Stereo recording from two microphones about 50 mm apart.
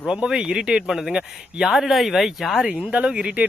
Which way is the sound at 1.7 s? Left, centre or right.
Centre.